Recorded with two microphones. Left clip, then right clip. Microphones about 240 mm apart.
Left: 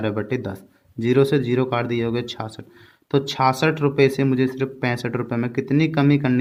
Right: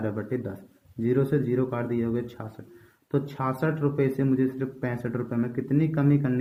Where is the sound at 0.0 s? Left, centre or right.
Left.